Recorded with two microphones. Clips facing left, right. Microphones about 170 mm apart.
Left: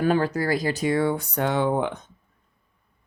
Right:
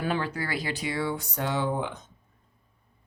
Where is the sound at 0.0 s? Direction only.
45° left (ahead or behind); by 2.0 s 60° left (ahead or behind).